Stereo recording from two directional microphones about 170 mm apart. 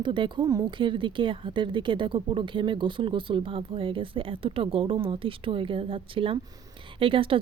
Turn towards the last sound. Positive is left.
turn(degrees=-30)  # may be behind; listen again after turning